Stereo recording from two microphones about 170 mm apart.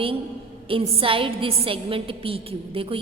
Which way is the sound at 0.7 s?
35° right (ahead or behind).